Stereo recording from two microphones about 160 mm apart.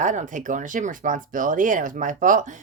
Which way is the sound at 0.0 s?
50° right (ahead or behind).